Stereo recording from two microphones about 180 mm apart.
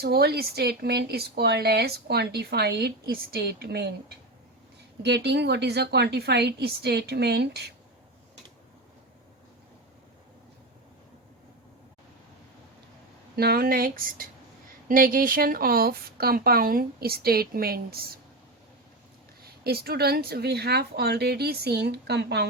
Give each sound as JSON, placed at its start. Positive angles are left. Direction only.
{"t": 0.0, "sound": "speech", "side_deg": -60}
{"t": 5.0, "sound": "a woman's voice", "side_deg": -70}
{"t": 13.3, "sound": "speech", "side_deg": -60}
{"t": 19.4, "sound": "speech", "side_deg": -60}